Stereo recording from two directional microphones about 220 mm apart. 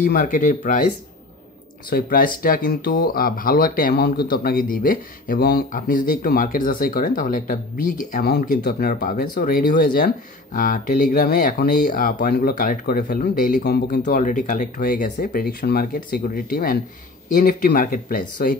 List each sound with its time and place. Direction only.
0.0 s speech: 40° left (ahead or behind)
1.9 s speech: 40° left (ahead or behind)